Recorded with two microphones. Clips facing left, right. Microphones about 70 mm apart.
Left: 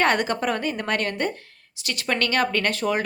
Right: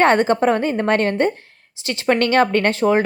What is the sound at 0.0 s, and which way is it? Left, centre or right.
A woman's voice, right.